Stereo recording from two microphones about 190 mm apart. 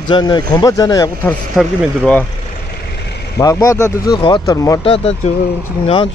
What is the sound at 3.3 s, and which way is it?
Speech, 15° left (ahead or behind).